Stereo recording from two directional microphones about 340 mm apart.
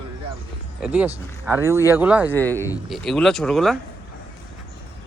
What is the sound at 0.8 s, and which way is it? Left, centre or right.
Speech, centre.